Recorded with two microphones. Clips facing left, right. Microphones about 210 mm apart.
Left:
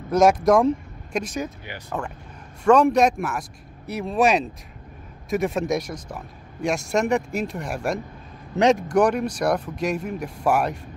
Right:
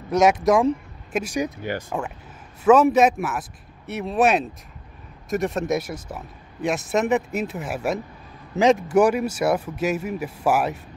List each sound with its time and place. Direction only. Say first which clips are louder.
0.1 s speech: left 1 dB; centre (ahead or behind)
1.6 s speech: right 10 dB; 45° right (ahead or behind)
1.9 s speech: right 1 dB; 5° right (ahead or behind)